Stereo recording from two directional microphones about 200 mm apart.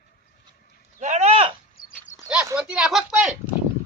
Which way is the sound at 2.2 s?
5° right (ahead or behind).